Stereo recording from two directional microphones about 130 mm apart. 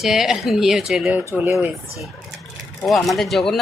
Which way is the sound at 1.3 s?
20° right (ahead or behind).